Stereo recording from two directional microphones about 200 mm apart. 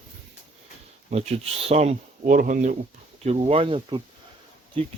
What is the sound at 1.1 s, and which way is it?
Speech, 30° right (ahead or behind).